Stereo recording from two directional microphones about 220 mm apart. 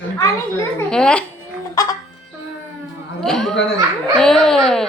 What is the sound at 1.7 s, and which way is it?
Music, 15° left (ahead or behind).